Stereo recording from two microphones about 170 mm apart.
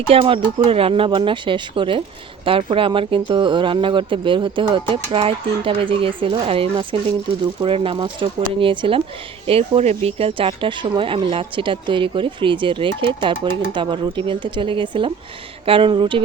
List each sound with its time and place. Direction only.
0.1 s speech: 35° right (ahead or behind)